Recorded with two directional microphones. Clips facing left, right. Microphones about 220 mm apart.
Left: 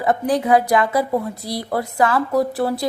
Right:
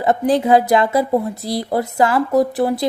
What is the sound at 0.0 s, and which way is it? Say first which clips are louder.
Speech: right 3 dB; 25° right (ahead or behind).